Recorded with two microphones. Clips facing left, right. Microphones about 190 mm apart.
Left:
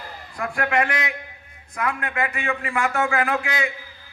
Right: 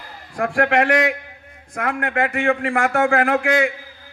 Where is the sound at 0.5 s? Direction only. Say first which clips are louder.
Right 6 dB; 75° right (ahead or behind).